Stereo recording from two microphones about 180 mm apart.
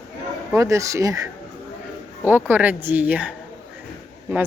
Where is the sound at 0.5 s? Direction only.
15° right (ahead or behind).